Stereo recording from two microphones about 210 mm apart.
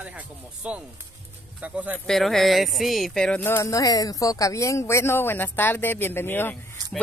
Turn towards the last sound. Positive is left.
turn(degrees=10)  # may be behind; listen again after turning